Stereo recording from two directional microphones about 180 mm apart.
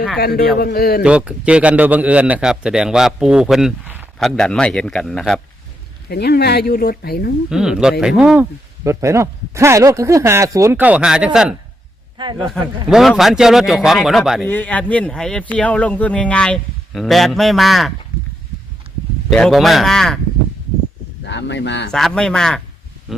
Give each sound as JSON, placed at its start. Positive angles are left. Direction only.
{"t": 0.2, "sound": "speech", "side_deg": 60}
{"t": 1.0, "sound": "a man's voice", "side_deg": -5}
{"t": 6.1, "sound": "speech", "side_deg": 65}
{"t": 7.5, "sound": "a man's voice", "side_deg": -5}
{"t": 8.8, "sound": "speech", "side_deg": -15}
{"t": 12.1, "sound": "a man's voice", "side_deg": -25}
{"t": 12.9, "sound": "a man's voice", "side_deg": 0}
{"t": 19.3, "sound": "a man's voice", "side_deg": 0}
{"t": 21.2, "sound": "speech", "side_deg": 80}
{"t": 21.9, "sound": "a man's voice", "side_deg": 0}